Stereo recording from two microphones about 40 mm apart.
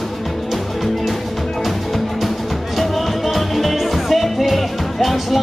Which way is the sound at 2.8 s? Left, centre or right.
Centre.